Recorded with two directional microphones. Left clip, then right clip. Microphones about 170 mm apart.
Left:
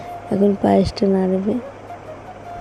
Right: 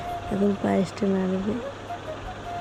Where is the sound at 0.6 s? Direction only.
25° left (ahead or behind).